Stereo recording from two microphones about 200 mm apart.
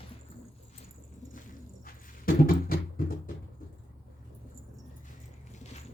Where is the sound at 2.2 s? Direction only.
45° left (ahead or behind).